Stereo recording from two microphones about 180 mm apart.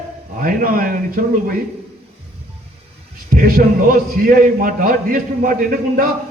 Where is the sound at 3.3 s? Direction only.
50° right (ahead or behind).